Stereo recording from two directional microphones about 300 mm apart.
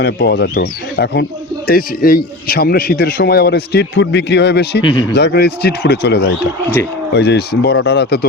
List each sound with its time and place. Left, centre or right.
0.0 s speech: left
4.8 s speech: centre
5.1 s speech: left